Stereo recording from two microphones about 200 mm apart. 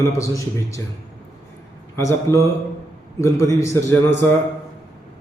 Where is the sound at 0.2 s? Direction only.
15° left (ahead or behind).